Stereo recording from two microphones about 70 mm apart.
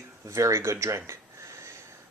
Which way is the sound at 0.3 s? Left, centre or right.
Right.